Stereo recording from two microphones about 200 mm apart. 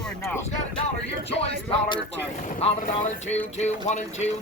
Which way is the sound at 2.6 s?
35° left (ahead or behind).